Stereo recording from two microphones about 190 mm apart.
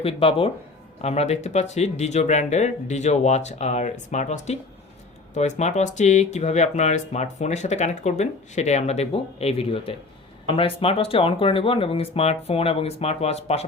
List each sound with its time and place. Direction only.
0.0 s speech: 30° left (ahead or behind)